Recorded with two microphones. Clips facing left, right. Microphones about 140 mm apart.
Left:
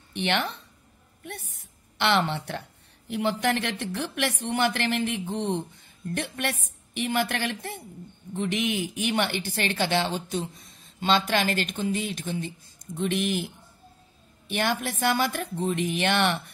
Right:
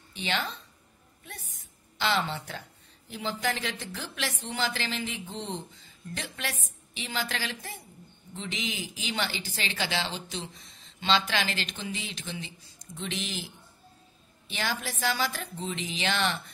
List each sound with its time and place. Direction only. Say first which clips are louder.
0.1 s a woman's voice: left 5 dB; 65° left (ahead or behind)
14.5 s speech: left 6 dB; 55° left (ahead or behind)